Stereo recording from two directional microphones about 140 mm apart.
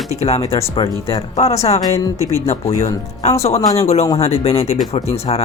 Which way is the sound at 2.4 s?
50° left (ahead or behind).